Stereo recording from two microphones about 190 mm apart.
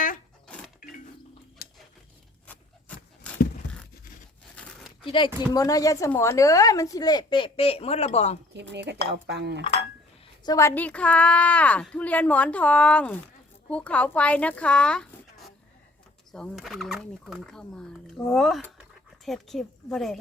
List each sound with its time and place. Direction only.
2.9 s a sound: 5° left (ahead or behind)
5.5 s a woman's voice: 20° left (ahead or behind); by 8.4 s 35° left (ahead or behind)
8.5 s speech: 65° right (ahead or behind)
10.4 s a woman's voice: 15° left (ahead or behind); by 20.1 s centre (ahead or behind)